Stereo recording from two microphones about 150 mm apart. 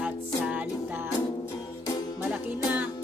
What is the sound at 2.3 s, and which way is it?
Music, 10° right (ahead or behind).